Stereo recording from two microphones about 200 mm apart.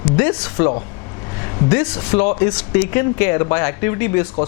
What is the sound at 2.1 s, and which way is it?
Speech, 25° left (ahead or behind).